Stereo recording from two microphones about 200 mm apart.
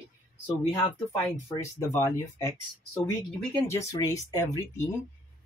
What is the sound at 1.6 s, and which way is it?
Speech, 15° left (ahead or behind).